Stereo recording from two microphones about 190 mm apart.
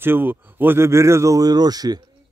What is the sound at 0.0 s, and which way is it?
Speech, 10° right (ahead or behind).